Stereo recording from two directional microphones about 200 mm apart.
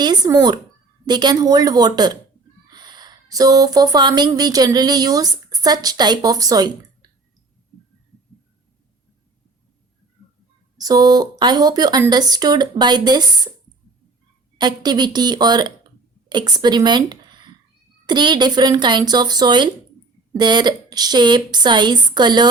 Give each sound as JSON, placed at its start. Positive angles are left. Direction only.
{"t": 0.0, "sound": "speech", "side_deg": -20}
{"t": 10.8, "sound": "speech", "side_deg": -20}
{"t": 14.6, "sound": "speech", "side_deg": -20}